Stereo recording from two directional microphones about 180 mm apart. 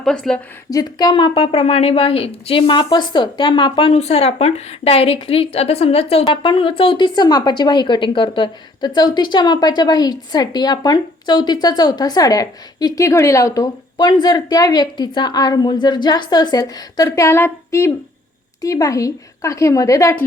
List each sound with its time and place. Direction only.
0.0 s a woman's voice: 5° left (ahead or behind)
0.7 s a woman's voice: 20° left (ahead or behind)